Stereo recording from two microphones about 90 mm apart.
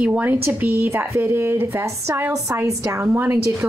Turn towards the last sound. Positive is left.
turn(degrees=-30)  # may be behind; listen again after turning